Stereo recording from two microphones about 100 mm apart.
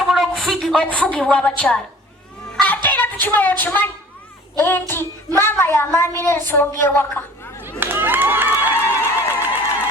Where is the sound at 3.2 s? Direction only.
20° left (ahead or behind).